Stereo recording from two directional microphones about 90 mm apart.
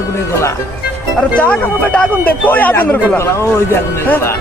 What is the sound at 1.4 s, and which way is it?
Speech, 20° left (ahead or behind).